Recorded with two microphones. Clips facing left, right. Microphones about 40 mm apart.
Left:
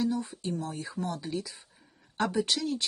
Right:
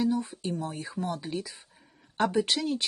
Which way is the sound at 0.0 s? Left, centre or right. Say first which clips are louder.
Right 2 dB; right.